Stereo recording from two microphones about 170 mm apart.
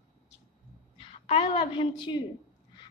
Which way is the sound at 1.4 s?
30° left (ahead or behind).